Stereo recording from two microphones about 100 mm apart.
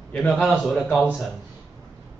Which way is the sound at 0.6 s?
Centre (ahead or behind).